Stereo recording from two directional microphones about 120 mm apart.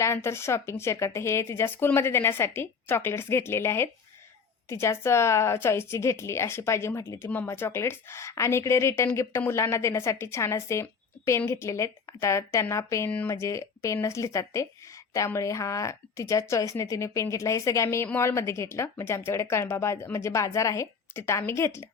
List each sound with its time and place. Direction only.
0.0 s a woman's voice: 20° left (ahead or behind)